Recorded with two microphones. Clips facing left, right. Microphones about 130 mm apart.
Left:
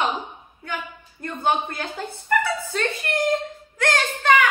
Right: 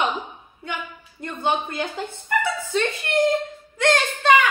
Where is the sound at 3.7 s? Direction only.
25° right (ahead or behind).